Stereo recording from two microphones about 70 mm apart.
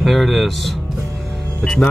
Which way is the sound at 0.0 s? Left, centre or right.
Centre.